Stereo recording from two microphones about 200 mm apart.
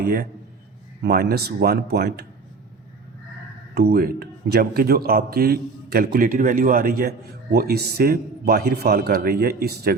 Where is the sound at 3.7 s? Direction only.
50° right (ahead or behind).